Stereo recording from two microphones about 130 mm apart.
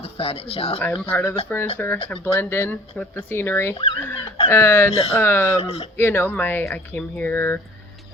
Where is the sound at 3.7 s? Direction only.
45° left (ahead or behind).